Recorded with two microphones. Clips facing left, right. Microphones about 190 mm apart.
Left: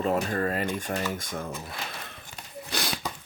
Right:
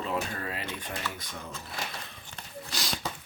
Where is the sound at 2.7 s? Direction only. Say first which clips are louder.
Left 6 dB; 55° left (ahead or behind).